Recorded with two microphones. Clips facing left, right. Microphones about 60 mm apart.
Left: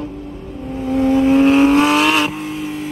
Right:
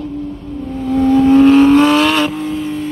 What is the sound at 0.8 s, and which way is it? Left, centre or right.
Vehicle, centre.